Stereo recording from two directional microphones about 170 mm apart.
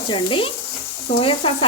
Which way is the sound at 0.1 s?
30° left (ahead or behind).